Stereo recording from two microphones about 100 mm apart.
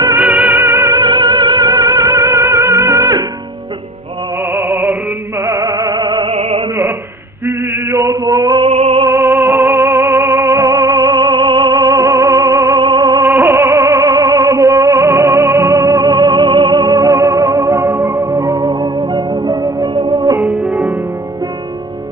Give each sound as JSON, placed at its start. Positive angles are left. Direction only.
{"t": 0.2, "sound": "music", "side_deg": -20}
{"t": 0.9, "sound": "music", "side_deg": -45}
{"t": 4.5, "sound": "music", "side_deg": -20}
{"t": 6.3, "sound": "music", "side_deg": -85}
{"t": 7.4, "sound": "male singing", "side_deg": -25}
{"t": 8.6, "sound": "music", "side_deg": -80}
{"t": 9.0, "sound": "music", "side_deg": -25}
{"t": 12.8, "sound": "music", "side_deg": -50}
{"t": 13.2, "sound": "music", "side_deg": -20}
{"t": 20.4, "sound": "music", "side_deg": -15}